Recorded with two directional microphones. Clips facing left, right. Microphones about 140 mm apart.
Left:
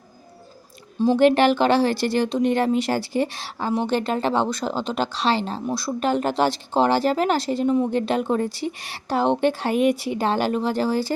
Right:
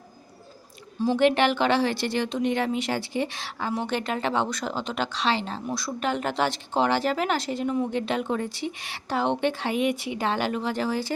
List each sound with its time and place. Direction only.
1.0 s speech: 35° left (ahead or behind)